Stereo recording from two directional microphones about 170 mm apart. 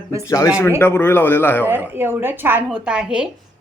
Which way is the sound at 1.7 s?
10° right (ahead or behind).